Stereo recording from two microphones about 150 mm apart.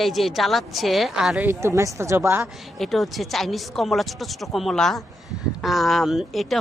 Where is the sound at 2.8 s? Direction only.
Centre (ahead or behind).